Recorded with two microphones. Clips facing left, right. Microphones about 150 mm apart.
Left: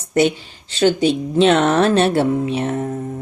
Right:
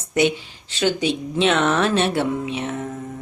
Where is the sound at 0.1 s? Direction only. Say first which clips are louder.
Left 3 dB; 35° left (ahead or behind).